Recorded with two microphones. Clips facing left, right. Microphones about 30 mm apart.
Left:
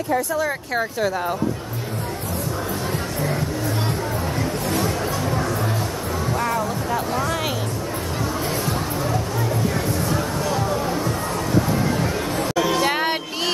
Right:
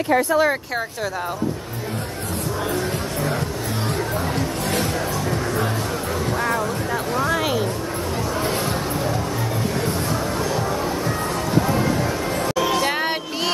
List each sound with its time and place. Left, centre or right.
6.9 s speech: centre
12.7 s speech: centre